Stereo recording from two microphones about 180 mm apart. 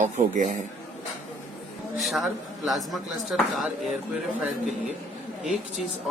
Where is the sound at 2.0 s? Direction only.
Centre (ahead or behind).